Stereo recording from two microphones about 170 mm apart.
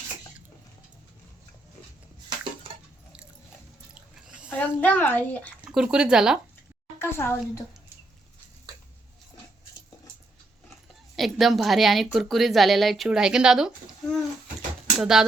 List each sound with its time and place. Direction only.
4.4 s a child's voice: 10° left (ahead or behind)
5.6 s a woman's voice: 5° right (ahead or behind)
7.0 s a child's voice: 15° left (ahead or behind)
11.2 s a woman's voice: centre (ahead or behind)